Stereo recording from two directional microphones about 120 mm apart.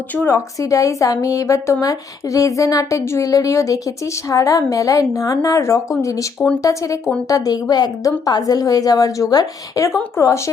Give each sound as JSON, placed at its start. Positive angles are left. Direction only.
{"t": 0.1, "sound": "speech", "side_deg": 15}
{"t": 0.3, "sound": "a woman's voice", "side_deg": 25}